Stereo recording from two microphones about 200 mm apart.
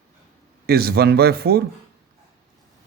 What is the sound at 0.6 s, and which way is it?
Speech, 50° right (ahead or behind).